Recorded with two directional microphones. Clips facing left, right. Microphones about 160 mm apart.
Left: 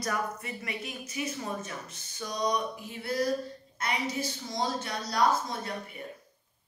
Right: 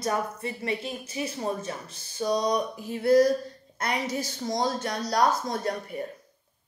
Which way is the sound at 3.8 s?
40° right (ahead or behind).